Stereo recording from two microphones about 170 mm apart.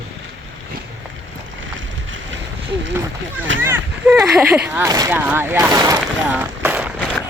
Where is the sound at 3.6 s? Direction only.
10° right (ahead or behind).